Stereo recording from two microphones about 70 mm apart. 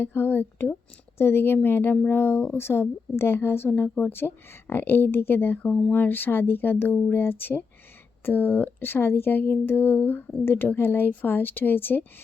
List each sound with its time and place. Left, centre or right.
0.0 s speech: left